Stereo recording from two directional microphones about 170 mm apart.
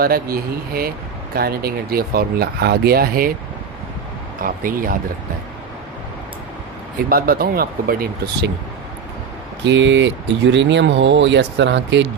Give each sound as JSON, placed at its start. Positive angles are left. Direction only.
{"t": 0.0, "sound": "speech", "side_deg": -60}
{"t": 4.4, "sound": "speech", "side_deg": -55}
{"t": 7.1, "sound": "speech", "side_deg": -60}
{"t": 9.6, "sound": "speech", "side_deg": -90}